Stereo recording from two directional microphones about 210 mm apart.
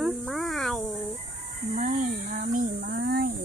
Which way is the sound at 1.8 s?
35° right (ahead or behind).